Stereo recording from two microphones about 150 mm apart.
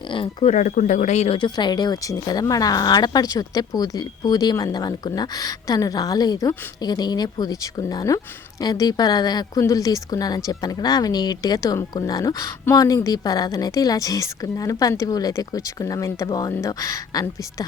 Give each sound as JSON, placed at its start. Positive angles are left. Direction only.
{"t": 0.1, "sound": "speech", "side_deg": 35}
{"t": 0.5, "sound": "speech", "side_deg": 55}
{"t": 1.4, "sound": "speech", "side_deg": 30}